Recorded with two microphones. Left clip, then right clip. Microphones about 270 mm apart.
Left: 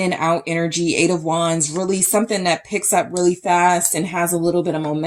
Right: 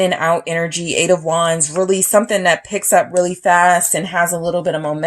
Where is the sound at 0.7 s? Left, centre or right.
Right.